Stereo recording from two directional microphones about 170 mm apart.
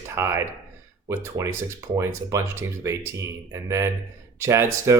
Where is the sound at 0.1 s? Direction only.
15° right (ahead or behind).